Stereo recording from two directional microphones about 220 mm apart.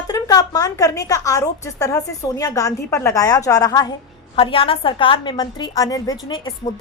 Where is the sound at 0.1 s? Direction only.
15° left (ahead or behind).